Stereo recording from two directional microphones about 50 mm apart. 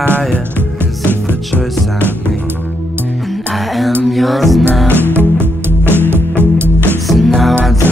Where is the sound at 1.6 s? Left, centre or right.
Centre.